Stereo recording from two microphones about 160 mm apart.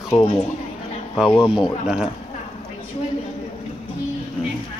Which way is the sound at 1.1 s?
5° right (ahead or behind).